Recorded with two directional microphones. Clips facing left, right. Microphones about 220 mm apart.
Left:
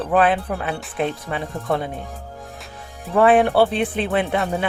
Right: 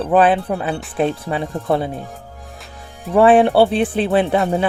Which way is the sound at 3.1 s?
30° right (ahead or behind).